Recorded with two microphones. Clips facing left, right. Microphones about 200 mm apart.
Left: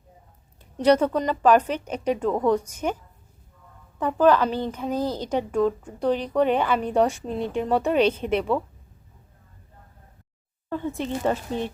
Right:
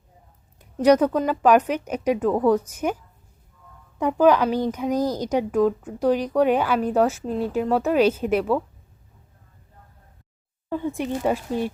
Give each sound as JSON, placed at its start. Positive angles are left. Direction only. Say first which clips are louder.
{"t": 0.8, "sound": "speech", "louder": "right 2 dB", "side_deg": -10}
{"t": 10.7, "sound": "speech", "louder": "right 2 dB", "side_deg": -15}